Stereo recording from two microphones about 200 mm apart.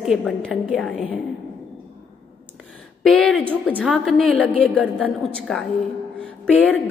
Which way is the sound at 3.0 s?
5° left (ahead or behind).